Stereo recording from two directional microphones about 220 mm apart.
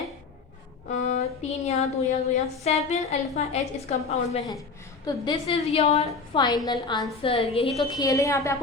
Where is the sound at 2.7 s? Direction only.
30° left (ahead or behind).